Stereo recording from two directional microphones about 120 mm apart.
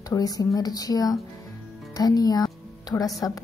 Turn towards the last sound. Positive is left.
turn(degrees=30)  # may be behind; listen again after turning